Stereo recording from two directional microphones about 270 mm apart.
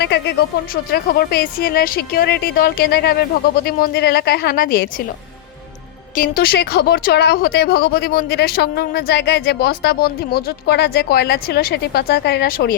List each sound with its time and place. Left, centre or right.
0.0 s speech: left
6.1 s speech: left